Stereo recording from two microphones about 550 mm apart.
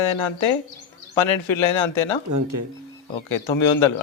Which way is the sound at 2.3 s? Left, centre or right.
Right.